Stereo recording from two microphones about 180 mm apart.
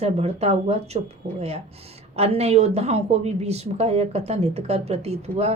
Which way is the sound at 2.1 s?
35° right (ahead or behind).